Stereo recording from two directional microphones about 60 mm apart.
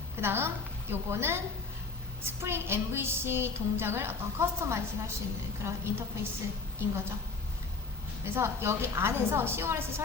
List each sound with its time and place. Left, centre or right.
0.2 s a woman's voice: right
8.2 s a woman's voice: right